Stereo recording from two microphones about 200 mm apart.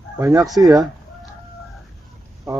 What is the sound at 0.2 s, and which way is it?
Speech, 15° right (ahead or behind).